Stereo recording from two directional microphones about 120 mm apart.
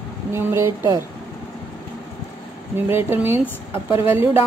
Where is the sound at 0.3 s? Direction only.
20° right (ahead or behind).